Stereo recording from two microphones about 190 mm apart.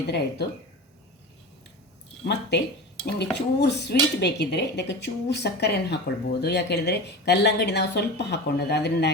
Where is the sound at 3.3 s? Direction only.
60° left (ahead or behind).